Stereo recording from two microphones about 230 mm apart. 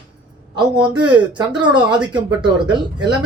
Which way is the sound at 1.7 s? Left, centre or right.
Centre.